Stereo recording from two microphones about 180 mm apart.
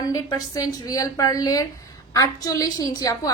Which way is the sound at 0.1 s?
20° left (ahead or behind).